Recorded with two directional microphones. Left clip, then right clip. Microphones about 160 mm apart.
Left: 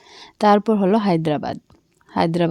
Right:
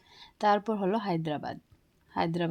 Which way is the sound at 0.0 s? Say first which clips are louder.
Left 10 dB; 45° left (ahead or behind).